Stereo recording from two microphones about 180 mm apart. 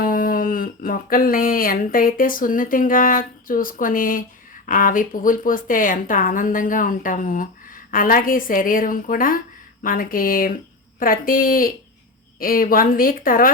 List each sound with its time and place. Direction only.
0.0 s a woman's voice: 50° left (ahead or behind)